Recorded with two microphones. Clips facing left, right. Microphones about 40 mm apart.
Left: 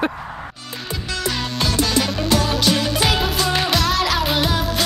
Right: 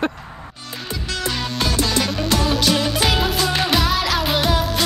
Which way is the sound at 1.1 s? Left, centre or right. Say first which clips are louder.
Even; centre.